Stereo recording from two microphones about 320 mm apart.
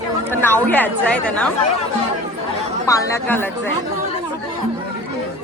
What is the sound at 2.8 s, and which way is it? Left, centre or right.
Speech, centre.